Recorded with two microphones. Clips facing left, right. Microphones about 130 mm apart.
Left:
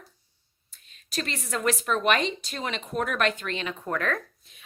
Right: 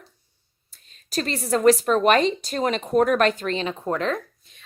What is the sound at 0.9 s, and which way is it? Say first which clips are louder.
Speech: right 6 dB; 40° right (ahead or behind).